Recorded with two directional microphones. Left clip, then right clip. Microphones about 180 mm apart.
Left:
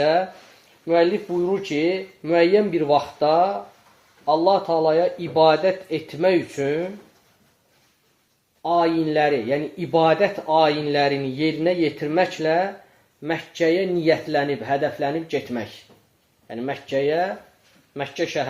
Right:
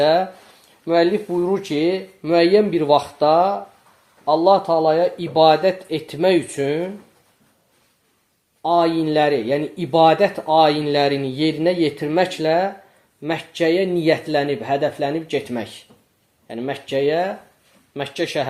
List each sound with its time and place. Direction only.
0.0 s speech: 35° right (ahead or behind)
8.6 s speech: 35° right (ahead or behind)